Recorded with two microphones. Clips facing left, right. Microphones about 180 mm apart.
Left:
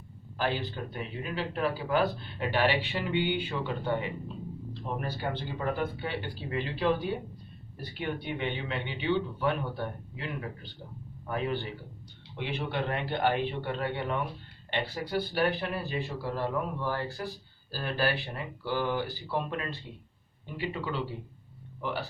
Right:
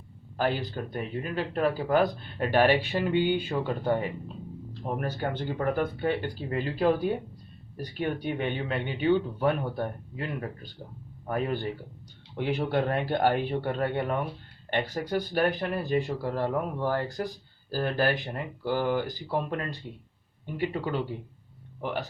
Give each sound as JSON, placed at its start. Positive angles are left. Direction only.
{"t": 0.3, "sound": "speech", "side_deg": -50}